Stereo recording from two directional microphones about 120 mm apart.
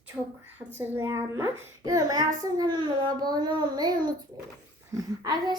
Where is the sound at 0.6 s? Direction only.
15° right (ahead or behind).